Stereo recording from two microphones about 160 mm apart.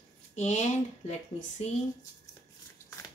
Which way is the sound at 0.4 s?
45° left (ahead or behind).